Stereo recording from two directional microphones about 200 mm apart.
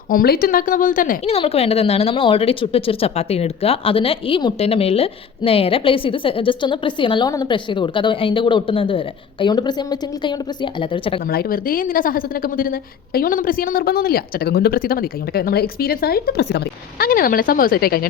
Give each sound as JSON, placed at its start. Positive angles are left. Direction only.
{"t": 0.1, "sound": "a woman's voice", "side_deg": 45}
{"t": 1.2, "sound": "speech", "side_deg": 30}
{"t": 11.3, "sound": "a woman's voice", "side_deg": 50}